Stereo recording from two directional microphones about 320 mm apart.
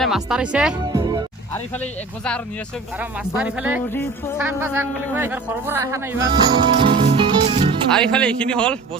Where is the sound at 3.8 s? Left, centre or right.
Centre.